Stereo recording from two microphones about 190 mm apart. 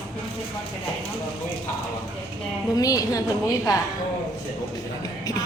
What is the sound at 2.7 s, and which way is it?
Speech, 20° left (ahead or behind).